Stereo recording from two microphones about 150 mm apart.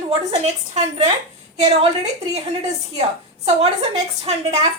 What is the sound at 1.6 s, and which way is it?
Speech, 45° right (ahead or behind).